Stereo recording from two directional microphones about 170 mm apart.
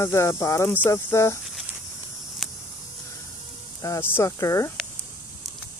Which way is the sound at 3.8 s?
15° left (ahead or behind).